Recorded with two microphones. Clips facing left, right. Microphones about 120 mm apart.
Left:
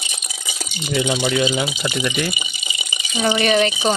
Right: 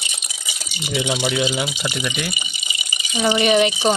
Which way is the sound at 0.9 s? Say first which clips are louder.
Left 2 dB; 10° right (ahead or behind).